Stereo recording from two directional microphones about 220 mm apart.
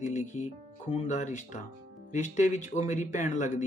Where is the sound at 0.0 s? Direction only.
30° left (ahead or behind).